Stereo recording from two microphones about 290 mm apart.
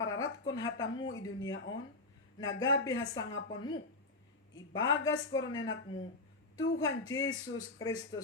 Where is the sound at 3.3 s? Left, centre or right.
Left.